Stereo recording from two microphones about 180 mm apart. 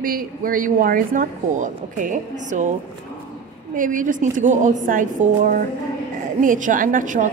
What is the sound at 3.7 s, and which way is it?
A woman's voice, 50° right (ahead or behind).